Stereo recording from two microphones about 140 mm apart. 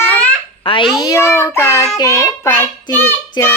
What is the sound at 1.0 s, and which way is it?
Child singing, 20° left (ahead or behind).